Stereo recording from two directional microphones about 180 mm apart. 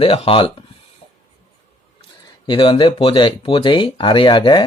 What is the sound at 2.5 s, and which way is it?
Speech, 30° left (ahead or behind).